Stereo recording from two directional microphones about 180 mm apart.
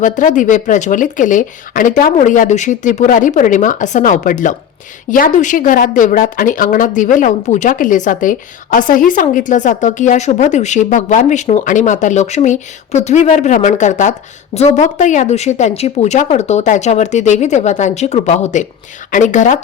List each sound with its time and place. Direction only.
0.0 s a woman's voice: 45° left (ahead or behind)